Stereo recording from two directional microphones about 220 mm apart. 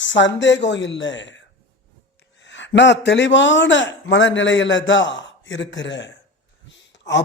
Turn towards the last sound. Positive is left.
turn(degrees=55)  # may be behind; listen again after turning